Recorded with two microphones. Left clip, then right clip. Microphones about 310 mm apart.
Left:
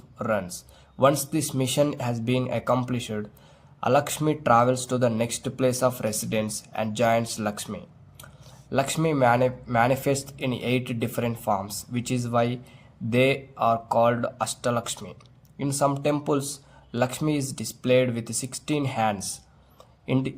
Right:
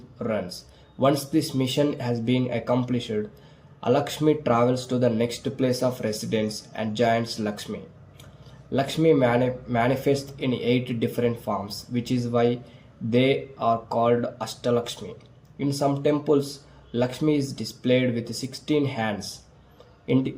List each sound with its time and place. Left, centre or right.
0.2 s speech: left